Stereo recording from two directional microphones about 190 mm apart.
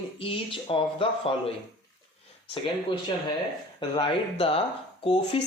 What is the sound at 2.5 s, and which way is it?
Speech, 25° left (ahead or behind).